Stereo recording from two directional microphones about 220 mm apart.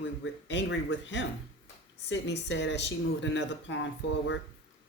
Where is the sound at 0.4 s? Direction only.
55° left (ahead or behind).